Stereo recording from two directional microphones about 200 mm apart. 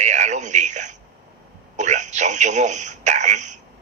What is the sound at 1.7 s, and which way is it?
Telephone, 35° right (ahead or behind).